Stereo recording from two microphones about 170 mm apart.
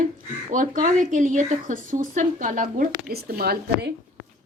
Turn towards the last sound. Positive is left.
turn(degrees=-65)  # may be behind; listen again after turning